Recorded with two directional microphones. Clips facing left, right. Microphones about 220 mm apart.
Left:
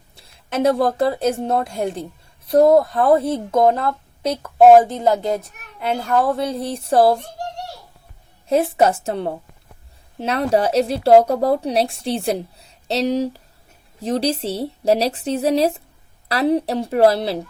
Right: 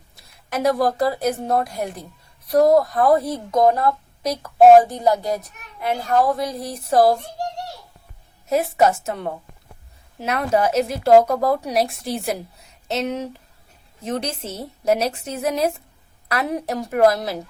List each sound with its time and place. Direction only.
0.2 s a woman's voice: 30° left (ahead or behind)
8.4 s a woman's voice: 30° left (ahead or behind)